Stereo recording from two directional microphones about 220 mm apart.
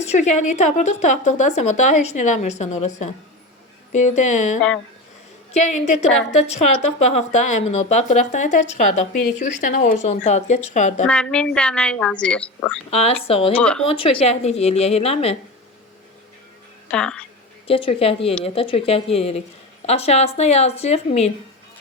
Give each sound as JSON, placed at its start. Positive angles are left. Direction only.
{"t": 0.0, "sound": "a woman's voice", "side_deg": 30}
{"t": 11.0, "sound": "a woman's voice", "side_deg": 5}
{"t": 12.9, "sound": "a woman's voice", "side_deg": 30}
{"t": 13.5, "sound": "a woman's voice", "side_deg": 5}
{"t": 13.8, "sound": "a woman's voice", "side_deg": 25}
{"t": 16.9, "sound": "a woman's voice", "side_deg": 5}
{"t": 17.7, "sound": "a woman's voice", "side_deg": 25}